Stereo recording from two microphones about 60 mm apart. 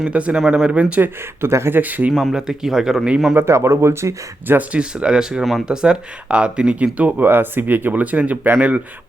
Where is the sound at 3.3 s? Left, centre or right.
Right.